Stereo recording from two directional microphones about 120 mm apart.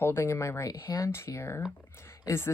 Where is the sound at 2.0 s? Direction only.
20° left (ahead or behind).